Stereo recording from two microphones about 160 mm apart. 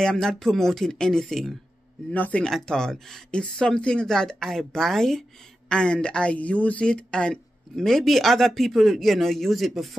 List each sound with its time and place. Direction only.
0.0 s speech: 5° left (ahead or behind)